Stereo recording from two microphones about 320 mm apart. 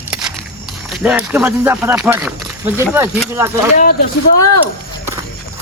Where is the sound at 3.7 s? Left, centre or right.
Left.